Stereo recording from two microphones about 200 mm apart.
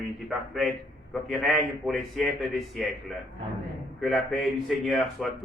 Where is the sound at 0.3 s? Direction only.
Centre (ahead or behind).